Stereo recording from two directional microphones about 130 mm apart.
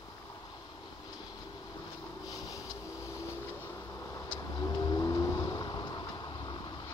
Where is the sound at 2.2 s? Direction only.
25° left (ahead or behind).